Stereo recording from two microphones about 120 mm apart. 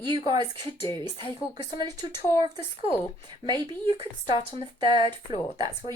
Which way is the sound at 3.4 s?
35° right (ahead or behind).